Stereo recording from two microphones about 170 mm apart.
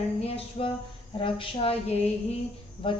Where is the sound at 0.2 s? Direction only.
35° left (ahead or behind).